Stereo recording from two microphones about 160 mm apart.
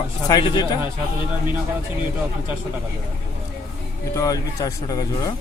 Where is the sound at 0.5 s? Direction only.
25° left (ahead or behind).